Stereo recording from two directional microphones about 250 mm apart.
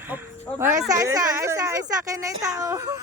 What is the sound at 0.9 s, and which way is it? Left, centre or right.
Speech, centre.